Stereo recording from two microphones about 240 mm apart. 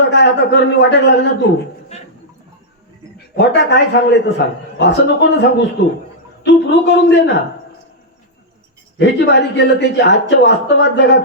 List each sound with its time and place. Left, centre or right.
0.0 s speech: left
1.9 s speech: left
3.3 s speech: left
9.0 s speech: left